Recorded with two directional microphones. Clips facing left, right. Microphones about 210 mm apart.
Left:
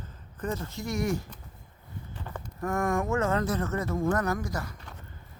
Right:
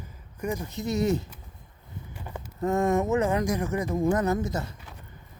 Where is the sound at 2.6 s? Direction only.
20° right (ahead or behind).